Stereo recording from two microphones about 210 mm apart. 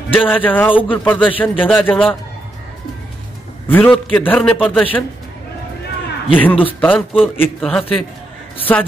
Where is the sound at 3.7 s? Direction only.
5° left (ahead or behind).